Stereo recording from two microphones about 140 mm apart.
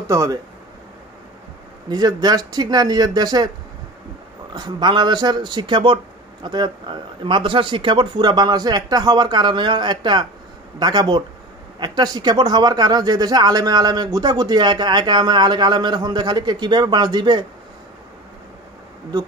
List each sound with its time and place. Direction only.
0.0 s speech: 20° right (ahead or behind)
1.9 s speech: 30° right (ahead or behind)
4.6 s speech: 30° right (ahead or behind)